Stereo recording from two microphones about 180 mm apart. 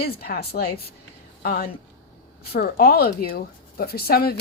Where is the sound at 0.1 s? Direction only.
60° left (ahead or behind).